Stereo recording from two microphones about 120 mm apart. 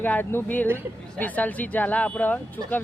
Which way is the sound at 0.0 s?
15° left (ahead or behind).